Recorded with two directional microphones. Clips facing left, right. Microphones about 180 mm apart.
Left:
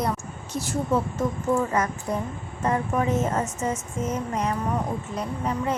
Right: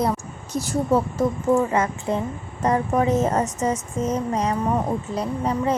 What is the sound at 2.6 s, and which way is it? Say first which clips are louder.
A woman's voice: right 4 dB; 40° right (ahead or behind).